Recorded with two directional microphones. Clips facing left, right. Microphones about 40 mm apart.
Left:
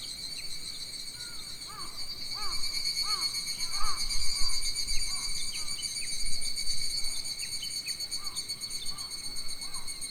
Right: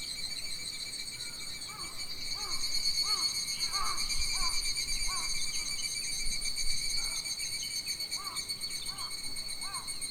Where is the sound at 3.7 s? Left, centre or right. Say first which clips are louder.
Even; right.